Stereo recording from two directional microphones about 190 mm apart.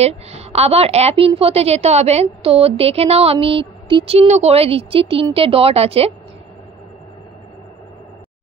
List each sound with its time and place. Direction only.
0.0 s a woman's voice: 35° right (ahead or behind)